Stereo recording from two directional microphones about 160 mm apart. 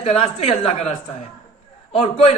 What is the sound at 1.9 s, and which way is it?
Speech, 35° left (ahead or behind).